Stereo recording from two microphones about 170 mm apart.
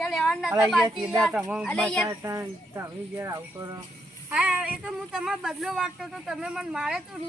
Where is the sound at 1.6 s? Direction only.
5° left (ahead or behind).